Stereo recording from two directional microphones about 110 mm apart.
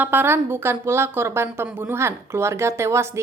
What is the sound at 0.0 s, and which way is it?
A woman's voice, 20° right (ahead or behind).